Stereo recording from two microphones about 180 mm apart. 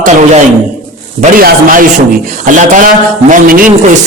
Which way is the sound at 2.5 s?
45° right (ahead or behind).